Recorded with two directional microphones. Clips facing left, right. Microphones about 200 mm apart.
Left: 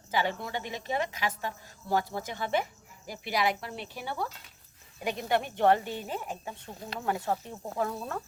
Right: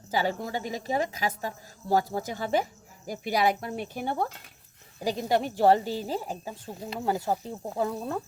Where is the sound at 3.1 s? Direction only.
45° right (ahead or behind).